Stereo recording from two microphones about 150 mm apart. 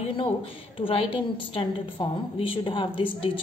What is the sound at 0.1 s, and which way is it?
A woman's voice, 35° left (ahead or behind).